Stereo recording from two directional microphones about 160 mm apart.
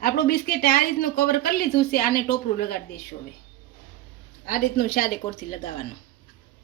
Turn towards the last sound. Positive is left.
turn(degrees=45)  # may be behind; listen again after turning